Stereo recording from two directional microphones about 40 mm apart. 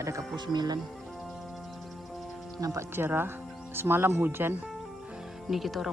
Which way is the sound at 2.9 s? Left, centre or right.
Right.